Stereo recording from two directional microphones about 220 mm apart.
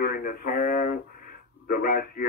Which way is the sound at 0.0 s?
45° left (ahead or behind).